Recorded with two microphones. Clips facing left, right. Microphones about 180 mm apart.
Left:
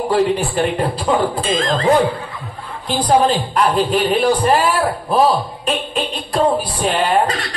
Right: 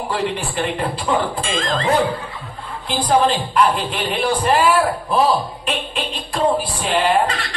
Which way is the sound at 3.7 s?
40° left (ahead or behind).